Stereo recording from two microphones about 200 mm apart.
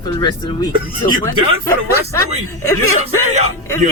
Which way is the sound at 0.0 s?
20° left (ahead or behind).